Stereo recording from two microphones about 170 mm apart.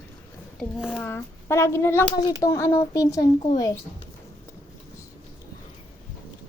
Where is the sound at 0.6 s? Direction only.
5° right (ahead or behind).